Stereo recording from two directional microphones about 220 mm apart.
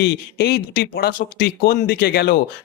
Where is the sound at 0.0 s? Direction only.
50° left (ahead or behind).